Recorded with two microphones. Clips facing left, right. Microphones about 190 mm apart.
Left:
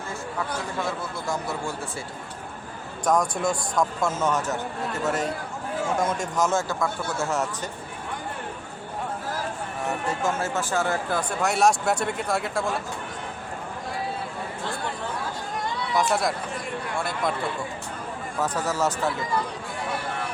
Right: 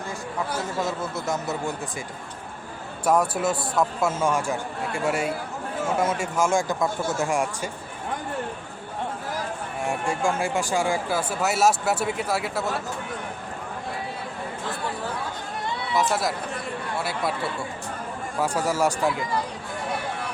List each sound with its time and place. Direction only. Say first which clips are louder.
0.6 s a man's voice: right 2 dB; 20° right (ahead or behind)
3.0 s speech: right 1 dB; 5° right (ahead or behind)
9.8 s speech: right 2 dB; 10° right (ahead or behind)
16.0 s speech: even; centre (ahead or behind)
18.3 s speech: right 2 dB; 10° right (ahead or behind)